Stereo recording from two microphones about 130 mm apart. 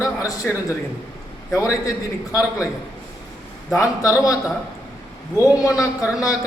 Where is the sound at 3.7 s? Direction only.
25° left (ahead or behind).